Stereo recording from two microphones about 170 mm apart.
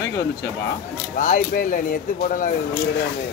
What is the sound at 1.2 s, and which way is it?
Speech, 55° left (ahead or behind).